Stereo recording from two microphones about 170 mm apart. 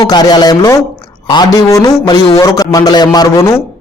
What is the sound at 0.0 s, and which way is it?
A man's voice, 25° left (ahead or behind).